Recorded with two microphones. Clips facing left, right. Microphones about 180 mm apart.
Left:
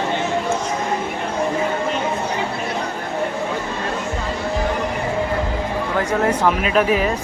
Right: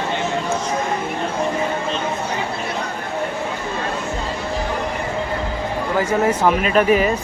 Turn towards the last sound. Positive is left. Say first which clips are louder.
# right 2 dB
turn(degrees=0)  # may be behind; listen again after turning